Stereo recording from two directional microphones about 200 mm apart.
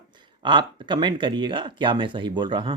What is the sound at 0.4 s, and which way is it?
Speech, 25° right (ahead or behind).